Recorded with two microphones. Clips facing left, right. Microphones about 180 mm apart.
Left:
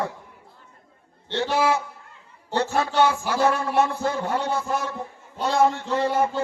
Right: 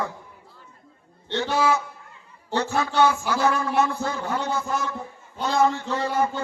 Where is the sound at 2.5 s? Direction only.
30° left (ahead or behind).